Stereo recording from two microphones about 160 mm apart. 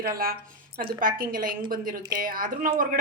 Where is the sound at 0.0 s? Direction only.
65° right (ahead or behind).